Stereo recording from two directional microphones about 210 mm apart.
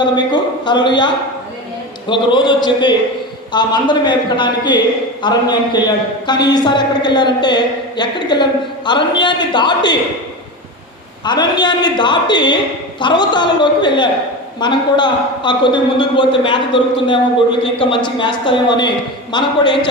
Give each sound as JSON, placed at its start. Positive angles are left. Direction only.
{"t": 0.3, "sound": "a sound", "side_deg": 20}
{"t": 2.0, "sound": "a man's voice", "side_deg": 20}
{"t": 11.3, "sound": "a man's voice", "side_deg": 20}